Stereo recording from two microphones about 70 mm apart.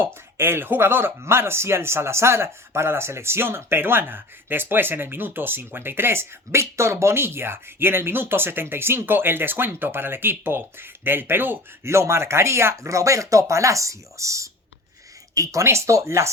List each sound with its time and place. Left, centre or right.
0.0 s speech: right